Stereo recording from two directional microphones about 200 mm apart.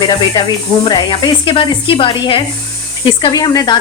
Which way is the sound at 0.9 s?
20° left (ahead or behind).